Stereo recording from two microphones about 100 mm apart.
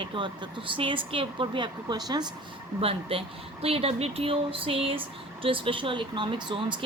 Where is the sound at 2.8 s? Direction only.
70° right (ahead or behind).